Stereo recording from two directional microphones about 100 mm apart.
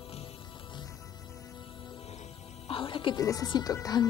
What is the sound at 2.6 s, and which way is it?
Music, 60° left (ahead or behind).